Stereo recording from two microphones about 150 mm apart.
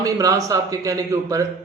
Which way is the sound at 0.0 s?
25° right (ahead or behind).